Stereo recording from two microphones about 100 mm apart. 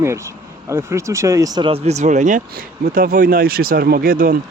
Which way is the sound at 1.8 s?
90° right.